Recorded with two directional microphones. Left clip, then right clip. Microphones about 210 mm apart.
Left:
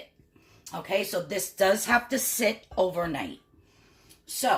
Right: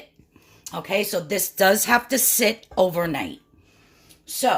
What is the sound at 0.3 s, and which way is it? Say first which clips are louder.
Speech: right 5 dB; 50° right (ahead or behind).